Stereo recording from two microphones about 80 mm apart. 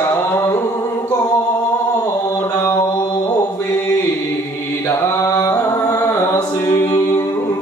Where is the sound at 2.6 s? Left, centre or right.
Left.